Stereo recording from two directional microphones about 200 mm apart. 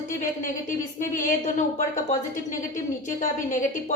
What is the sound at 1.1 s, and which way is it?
Speech, 40° left (ahead or behind).